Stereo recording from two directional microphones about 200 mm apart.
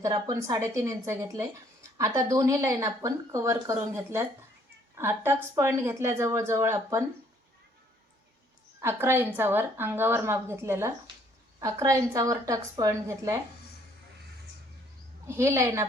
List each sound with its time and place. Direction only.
0.0 s speech: 20° right (ahead or behind)
8.8 s speech: 10° right (ahead or behind)
15.3 s speech: 15° right (ahead or behind)